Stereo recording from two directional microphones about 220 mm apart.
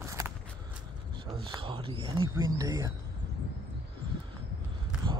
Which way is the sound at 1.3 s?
25° right (ahead or behind).